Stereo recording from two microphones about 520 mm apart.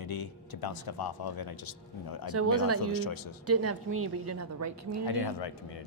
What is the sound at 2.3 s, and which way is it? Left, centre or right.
A woman's voice, right.